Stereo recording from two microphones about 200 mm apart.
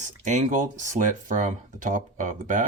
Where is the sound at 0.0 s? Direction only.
35° right (ahead or behind).